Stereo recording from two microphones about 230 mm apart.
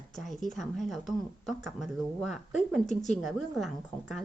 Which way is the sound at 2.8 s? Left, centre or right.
Left.